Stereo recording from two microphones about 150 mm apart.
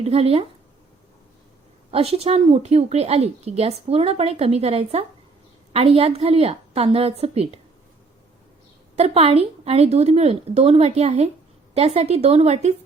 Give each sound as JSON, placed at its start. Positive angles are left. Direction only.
{"t": 0.0, "sound": "a woman's voice", "side_deg": -40}
{"t": 1.9, "sound": "a woman's voice", "side_deg": -40}
{"t": 9.0, "sound": "speech", "side_deg": -45}